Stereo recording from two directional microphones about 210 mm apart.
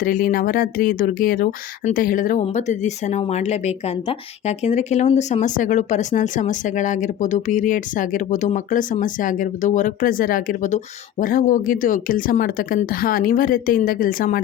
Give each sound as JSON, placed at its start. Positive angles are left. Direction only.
{"t": 0.0, "sound": "speech", "side_deg": 40}